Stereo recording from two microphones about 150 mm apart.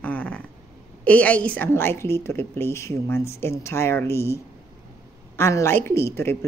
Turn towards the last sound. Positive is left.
turn(degrees=15)  # may be behind; listen again after turning